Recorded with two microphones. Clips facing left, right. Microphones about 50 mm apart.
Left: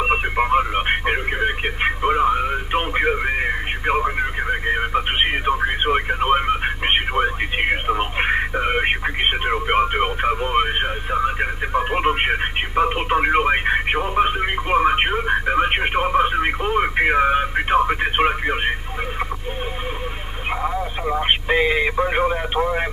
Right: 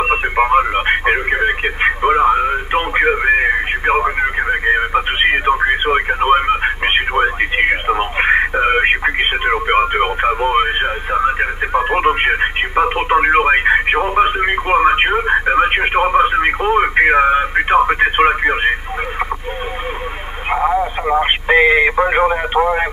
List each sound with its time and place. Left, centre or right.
0.0 s radio: right
20.6 s a sound: right
21.5 s radio: centre